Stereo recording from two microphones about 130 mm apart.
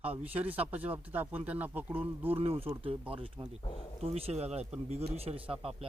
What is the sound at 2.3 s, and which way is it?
Speech, 45° right (ahead or behind).